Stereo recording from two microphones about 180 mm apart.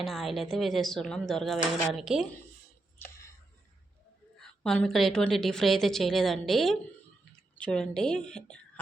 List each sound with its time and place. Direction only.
0.0 s a woman's voice: centre (ahead or behind)
3.0 s a sound: 15° left (ahead or behind)
4.4 s a woman's voice: 5° left (ahead or behind)